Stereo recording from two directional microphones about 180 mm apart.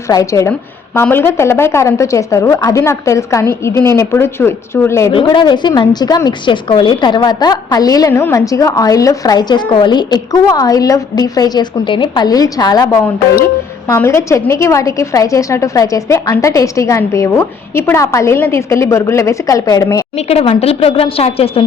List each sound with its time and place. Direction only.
0.1 s a woman's voice: 20° left (ahead or behind)
5.1 s a woman's voice: 25° left (ahead or behind)
20.2 s a woman's voice: 35° left (ahead or behind)